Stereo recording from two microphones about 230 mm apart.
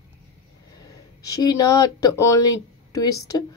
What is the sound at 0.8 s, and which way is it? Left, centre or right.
Speech, centre.